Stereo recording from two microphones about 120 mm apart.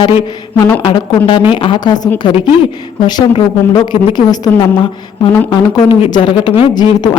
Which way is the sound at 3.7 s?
35° left (ahead or behind).